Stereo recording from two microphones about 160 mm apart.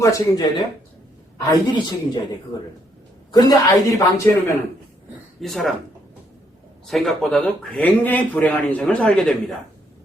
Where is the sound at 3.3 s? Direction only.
25° left (ahead or behind).